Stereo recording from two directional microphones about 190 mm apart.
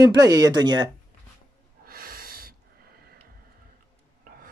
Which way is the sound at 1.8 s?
50° right (ahead or behind).